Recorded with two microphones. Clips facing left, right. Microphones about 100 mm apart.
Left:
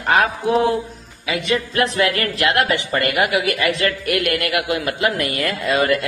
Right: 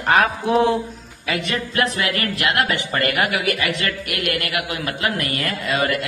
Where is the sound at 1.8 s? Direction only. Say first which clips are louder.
Left 2 dB; 35° left (ahead or behind).